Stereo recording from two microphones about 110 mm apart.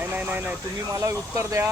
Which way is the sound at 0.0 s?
15° right (ahead or behind).